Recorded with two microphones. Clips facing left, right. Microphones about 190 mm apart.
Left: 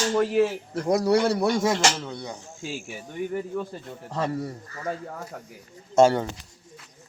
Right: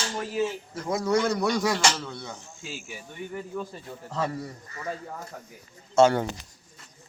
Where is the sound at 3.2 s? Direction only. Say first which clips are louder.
Left 8 dB; 55° left (ahead or behind).